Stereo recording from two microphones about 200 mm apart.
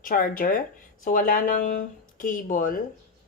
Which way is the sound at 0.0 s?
45° left (ahead or behind).